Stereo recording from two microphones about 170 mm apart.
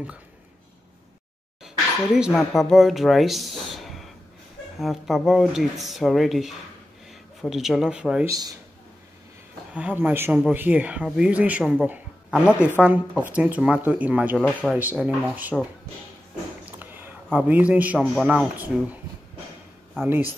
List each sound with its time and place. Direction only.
2.1 s speech: 5° right (ahead or behind)
8.3 s a man's voice: 20° right (ahead or behind)
9.8 s speech: 10° right (ahead or behind)
16.8 s a sound: 10° right (ahead or behind)
18.1 s speech: centre (ahead or behind)
20.0 s speech: 15° right (ahead or behind)